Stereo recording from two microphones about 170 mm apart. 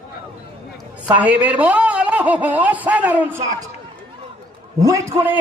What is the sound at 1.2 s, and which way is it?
A man's voice, 10° right (ahead or behind).